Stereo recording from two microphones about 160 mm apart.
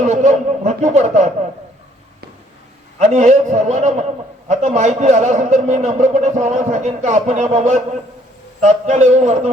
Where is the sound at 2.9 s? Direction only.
45° right (ahead or behind).